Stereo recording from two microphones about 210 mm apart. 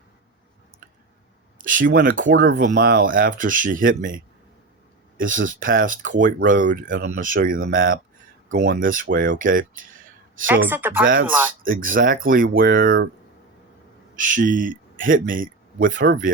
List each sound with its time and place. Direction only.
1.5 s speech: 40° right (ahead or behind)
10.4 s a woman's voice: 10° right (ahead or behind)
11.0 s speech: 40° right (ahead or behind)
14.2 s speech: 40° right (ahead or behind)